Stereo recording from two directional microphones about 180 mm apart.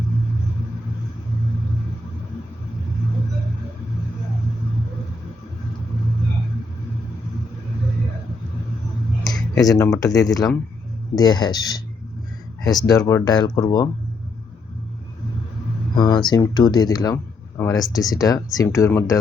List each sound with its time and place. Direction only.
9.6 s speech: 15° left (ahead or behind)
12.9 s speech: 15° left (ahead or behind)
16.0 s speech: 25° left (ahead or behind)